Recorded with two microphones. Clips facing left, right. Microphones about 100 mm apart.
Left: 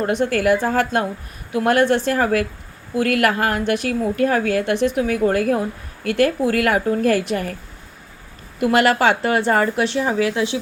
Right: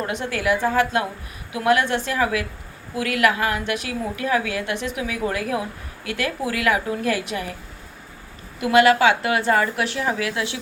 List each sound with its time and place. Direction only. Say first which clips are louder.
0.0 s a woman's voice: left 6 dB; 40° left (ahead or behind)
8.6 s a woman's voice: even; 40° left (ahead or behind)
9.8 s speech: left 5 dB; 25° left (ahead or behind)